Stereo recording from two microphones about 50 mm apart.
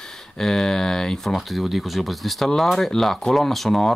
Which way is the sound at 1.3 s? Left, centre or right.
Centre.